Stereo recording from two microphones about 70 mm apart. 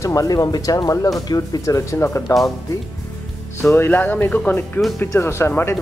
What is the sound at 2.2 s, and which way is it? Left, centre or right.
Speech, left.